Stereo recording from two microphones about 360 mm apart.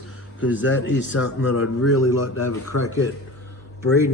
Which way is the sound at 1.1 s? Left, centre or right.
Left.